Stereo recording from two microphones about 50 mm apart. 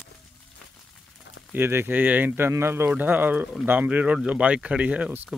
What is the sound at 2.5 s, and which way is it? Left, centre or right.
Speech, right.